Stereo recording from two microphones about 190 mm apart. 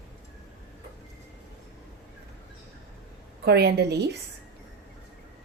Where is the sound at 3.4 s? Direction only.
60° right (ahead or behind).